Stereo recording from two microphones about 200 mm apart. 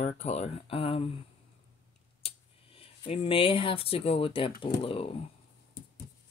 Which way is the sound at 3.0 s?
25° left (ahead or behind).